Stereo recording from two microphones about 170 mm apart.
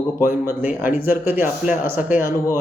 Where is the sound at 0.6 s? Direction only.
15° right (ahead or behind).